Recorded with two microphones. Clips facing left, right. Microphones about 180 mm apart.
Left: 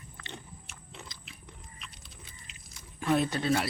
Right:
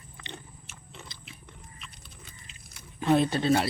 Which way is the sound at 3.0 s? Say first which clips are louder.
Right 4 dB; 30° right (ahead or behind).